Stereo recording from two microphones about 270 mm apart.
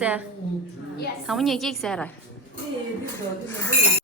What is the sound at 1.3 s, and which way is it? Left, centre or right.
Speech, centre.